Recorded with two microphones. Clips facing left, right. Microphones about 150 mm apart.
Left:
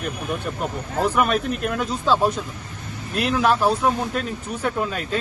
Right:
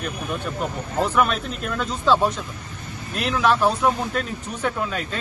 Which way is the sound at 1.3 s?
55° left (ahead or behind).